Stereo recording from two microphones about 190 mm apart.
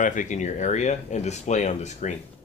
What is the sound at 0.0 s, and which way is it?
Speech, 40° left (ahead or behind).